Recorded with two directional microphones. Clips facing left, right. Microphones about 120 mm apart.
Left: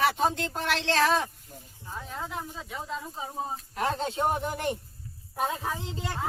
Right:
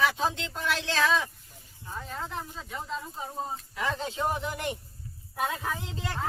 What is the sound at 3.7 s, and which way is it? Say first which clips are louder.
Speech: left 3 dB; 55° left (ahead or behind).